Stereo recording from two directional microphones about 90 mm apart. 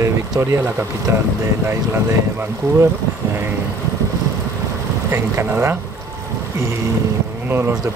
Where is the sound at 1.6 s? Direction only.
30° right (ahead or behind).